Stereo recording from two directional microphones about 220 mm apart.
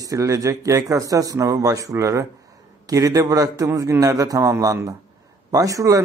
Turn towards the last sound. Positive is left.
turn(degrees=-15)  # may be behind; listen again after turning